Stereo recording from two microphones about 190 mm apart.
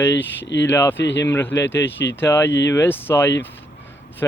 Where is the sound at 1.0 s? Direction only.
70° left (ahead or behind).